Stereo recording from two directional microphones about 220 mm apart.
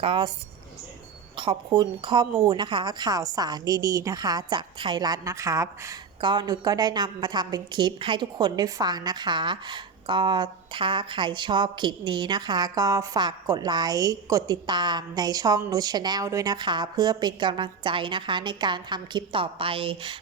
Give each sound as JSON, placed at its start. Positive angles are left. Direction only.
{"t": 0.0, "sound": "speech", "side_deg": -25}
{"t": 1.4, "sound": "speech", "side_deg": -20}